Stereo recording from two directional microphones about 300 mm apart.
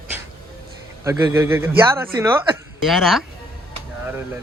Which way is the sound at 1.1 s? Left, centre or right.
Centre.